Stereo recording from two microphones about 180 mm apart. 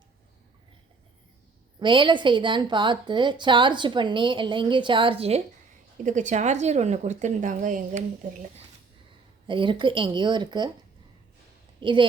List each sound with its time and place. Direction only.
1.8 s a woman's voice: 25° right (ahead or behind)
6.1 s a woman's voice: 45° right (ahead or behind)
9.5 s a woman's voice: 25° right (ahead or behind)
11.8 s a woman's voice: 25° right (ahead or behind)